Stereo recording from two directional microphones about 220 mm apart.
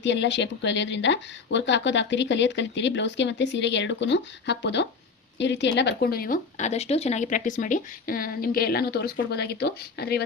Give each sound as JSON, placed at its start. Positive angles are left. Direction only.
{"t": 0.0, "sound": "speech", "side_deg": 55}